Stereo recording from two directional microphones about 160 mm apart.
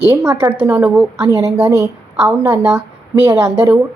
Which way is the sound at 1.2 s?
20° right (ahead or behind).